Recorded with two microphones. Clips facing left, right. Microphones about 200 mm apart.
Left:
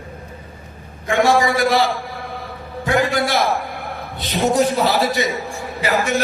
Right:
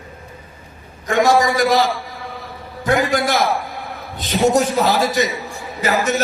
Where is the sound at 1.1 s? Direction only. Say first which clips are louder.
Right 1 dB; 40° right (ahead or behind).